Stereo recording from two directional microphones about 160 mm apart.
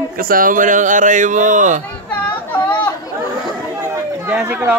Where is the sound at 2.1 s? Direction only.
10° left (ahead or behind).